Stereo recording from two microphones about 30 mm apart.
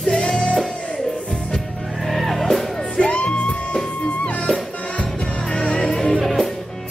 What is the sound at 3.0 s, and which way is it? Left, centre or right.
Music, left.